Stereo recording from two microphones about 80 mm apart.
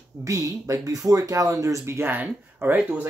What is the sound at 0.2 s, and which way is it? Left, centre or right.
Speech, right.